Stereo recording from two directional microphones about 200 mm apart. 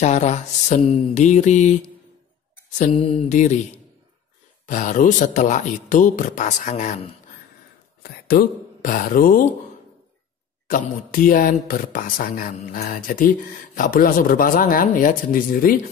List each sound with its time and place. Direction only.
0.0 s speech: 35° left (ahead or behind)
8.0 s speech: 50° left (ahead or behind)
11.2 s mantra: 45° left (ahead or behind)